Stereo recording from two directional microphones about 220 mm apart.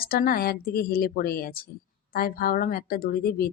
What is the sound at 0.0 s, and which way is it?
A woman's voice, 40° left (ahead or behind).